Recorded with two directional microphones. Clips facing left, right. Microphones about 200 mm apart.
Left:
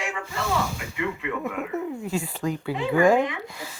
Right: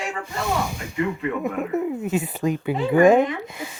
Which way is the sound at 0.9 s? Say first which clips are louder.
Right 5 dB; 40° right (ahead or behind).